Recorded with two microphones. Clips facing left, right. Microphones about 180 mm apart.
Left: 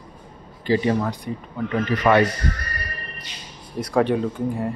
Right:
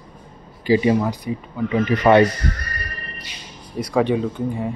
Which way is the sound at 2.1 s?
20° right (ahead or behind).